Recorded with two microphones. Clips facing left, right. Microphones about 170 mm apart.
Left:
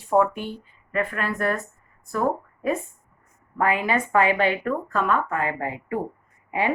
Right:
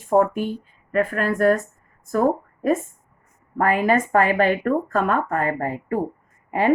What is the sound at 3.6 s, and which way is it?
A woman's voice, 45° right (ahead or behind).